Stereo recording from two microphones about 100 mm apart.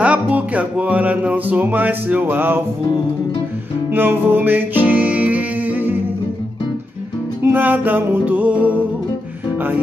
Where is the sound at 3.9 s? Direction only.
20° right (ahead or behind).